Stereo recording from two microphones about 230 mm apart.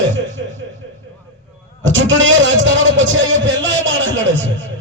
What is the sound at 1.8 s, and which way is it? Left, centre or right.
Speech, right.